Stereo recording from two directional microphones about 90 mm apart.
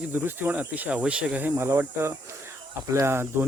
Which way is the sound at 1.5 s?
25° right (ahead or behind).